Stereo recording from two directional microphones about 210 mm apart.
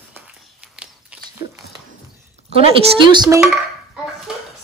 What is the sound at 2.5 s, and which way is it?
Speech, 25° right (ahead or behind).